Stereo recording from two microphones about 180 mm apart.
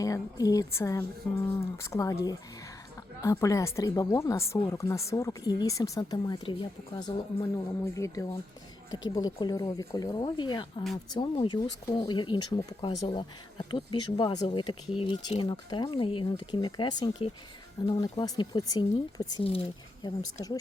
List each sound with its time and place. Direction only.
0.0 s speech: 20° left (ahead or behind)
3.2 s speech: 15° left (ahead or behind)